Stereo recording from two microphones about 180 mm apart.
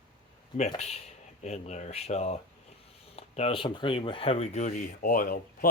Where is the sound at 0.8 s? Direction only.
35° left (ahead or behind).